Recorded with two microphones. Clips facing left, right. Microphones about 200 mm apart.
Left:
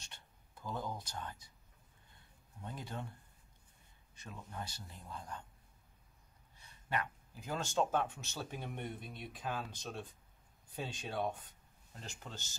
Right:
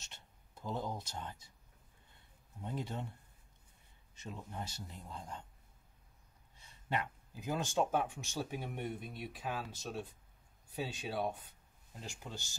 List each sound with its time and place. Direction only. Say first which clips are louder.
0.0 s speech: even; 25° right (ahead or behind)
2.6 s a man's voice: right 4 dB; 25° right (ahead or behind)
4.1 s a man's voice: right 3 dB; 25° right (ahead or behind)
6.6 s speech: right 1 dB; 25° right (ahead or behind)